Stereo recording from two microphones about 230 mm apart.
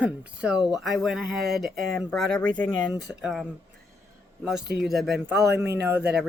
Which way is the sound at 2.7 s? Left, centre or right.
Centre.